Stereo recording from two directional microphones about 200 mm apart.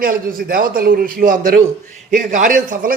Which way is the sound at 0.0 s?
45° right (ahead or behind).